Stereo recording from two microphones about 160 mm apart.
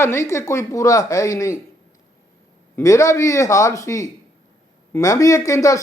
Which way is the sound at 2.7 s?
20° left (ahead or behind).